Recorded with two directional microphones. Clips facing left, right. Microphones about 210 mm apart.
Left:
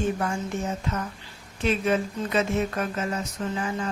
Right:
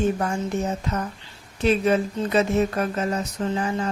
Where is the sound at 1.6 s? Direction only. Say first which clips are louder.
Right 4 dB; 35° right (ahead or behind).